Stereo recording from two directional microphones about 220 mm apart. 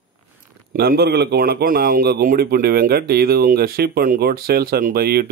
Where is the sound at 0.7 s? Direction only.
45° right (ahead or behind).